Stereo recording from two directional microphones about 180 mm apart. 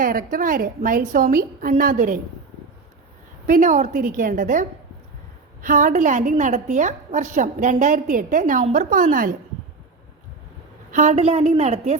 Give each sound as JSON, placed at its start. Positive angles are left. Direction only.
{"t": 0.0, "sound": "a woman's voice", "side_deg": -50}
{"t": 3.4, "sound": "a woman's voice", "side_deg": -45}
{"t": 5.6, "sound": "a woman's voice", "side_deg": -45}
{"t": 10.9, "sound": "a woman's voice", "side_deg": -40}